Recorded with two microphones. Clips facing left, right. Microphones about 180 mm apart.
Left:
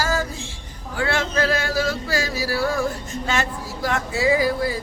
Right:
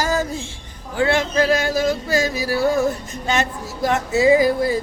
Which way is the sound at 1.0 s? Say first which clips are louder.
Right 4 dB; 15° right (ahead or behind).